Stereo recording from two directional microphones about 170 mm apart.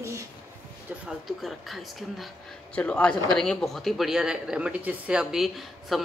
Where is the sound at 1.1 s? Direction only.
Centre (ahead or behind).